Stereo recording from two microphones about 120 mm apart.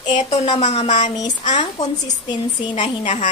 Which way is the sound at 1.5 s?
90° left.